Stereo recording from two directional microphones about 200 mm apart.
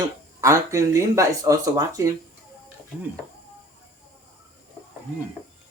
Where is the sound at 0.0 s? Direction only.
15° right (ahead or behind).